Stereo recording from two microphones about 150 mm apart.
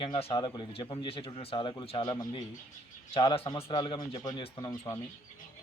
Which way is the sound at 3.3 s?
40° left (ahead or behind).